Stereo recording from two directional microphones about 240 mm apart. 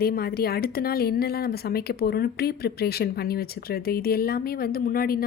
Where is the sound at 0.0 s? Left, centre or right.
Left.